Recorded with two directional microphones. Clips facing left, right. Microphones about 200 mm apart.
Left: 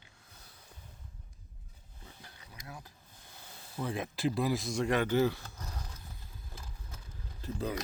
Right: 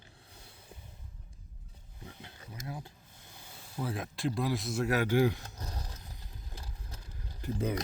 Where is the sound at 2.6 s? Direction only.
25° right (ahead or behind).